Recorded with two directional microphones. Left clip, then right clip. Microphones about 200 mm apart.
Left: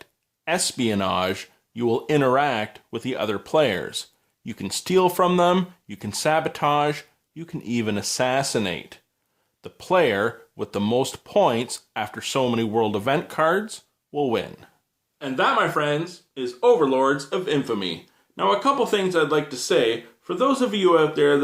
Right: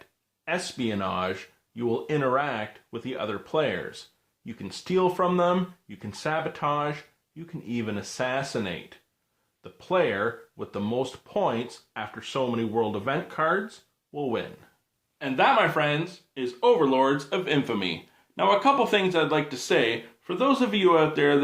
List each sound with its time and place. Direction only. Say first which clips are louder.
0.0 s speech: left 6 dB; 45° left (ahead or behind)
15.2 s speech: left 1 dB; 5° right (ahead or behind)